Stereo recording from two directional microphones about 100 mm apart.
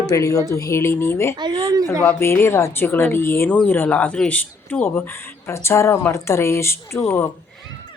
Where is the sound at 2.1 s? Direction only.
25° left (ahead or behind).